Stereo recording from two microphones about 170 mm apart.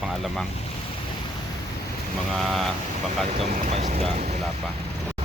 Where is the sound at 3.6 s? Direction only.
40° right (ahead or behind).